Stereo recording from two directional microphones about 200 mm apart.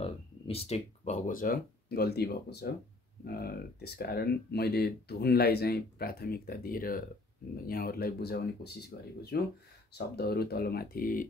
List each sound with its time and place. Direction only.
0.0 s speech: 30° left (ahead or behind)